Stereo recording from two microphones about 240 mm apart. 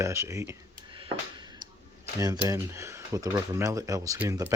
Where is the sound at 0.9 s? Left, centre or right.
Centre.